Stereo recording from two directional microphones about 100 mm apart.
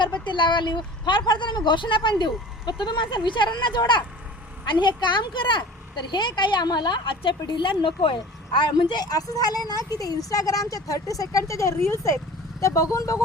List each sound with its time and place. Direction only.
0.3 s a woman's voice: 50° left (ahead or behind); by 13.1 s 35° left (ahead or behind)